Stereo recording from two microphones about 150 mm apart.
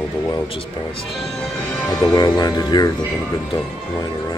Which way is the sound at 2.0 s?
25° left (ahead or behind).